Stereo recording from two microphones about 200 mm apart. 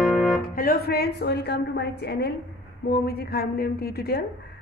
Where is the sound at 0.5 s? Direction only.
50° left (ahead or behind).